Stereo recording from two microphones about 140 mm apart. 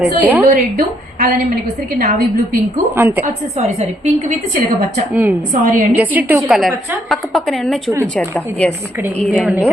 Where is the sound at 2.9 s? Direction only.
15° right (ahead or behind).